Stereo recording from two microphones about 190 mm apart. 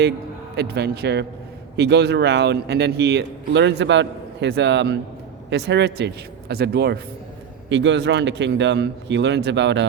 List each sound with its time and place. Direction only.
0.5 s a man's voice: 60° right (ahead or behind)
7.7 s a man's voice: 70° right (ahead or behind)